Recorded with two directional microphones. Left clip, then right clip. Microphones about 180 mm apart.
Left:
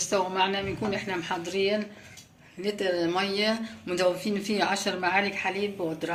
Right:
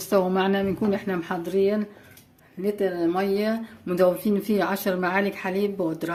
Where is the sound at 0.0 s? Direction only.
65° right (ahead or behind).